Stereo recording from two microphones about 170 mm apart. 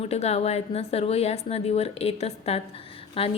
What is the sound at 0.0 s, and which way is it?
A woman's voice, 40° left (ahead or behind).